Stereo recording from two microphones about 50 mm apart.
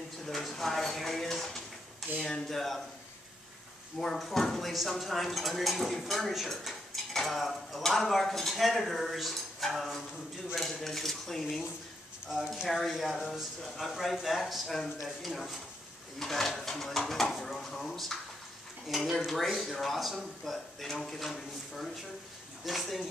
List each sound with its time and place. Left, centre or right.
0.3 s a sound: centre
2.1 s speech: centre
4.0 s speech: centre